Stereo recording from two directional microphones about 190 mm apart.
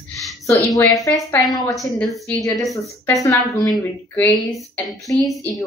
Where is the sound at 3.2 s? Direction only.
15° left (ahead or behind).